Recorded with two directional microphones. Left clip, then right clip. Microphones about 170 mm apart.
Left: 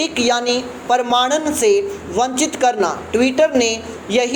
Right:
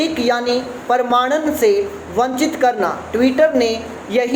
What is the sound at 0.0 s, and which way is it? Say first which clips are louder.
A woman's voice: even; 25° left (ahead or behind).